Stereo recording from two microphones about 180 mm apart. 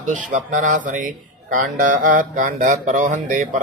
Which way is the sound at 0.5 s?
45° right (ahead or behind).